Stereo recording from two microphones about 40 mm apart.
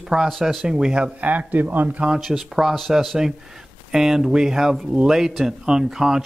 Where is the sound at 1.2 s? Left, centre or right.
Right.